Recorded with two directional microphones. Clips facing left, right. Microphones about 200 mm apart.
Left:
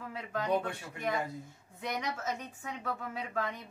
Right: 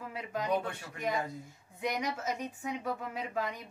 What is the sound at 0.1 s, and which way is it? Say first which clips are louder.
Speech: even; 10° right (ahead or behind).